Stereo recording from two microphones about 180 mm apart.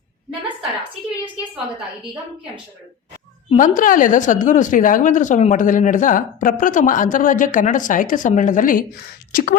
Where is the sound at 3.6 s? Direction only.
45° left (ahead or behind).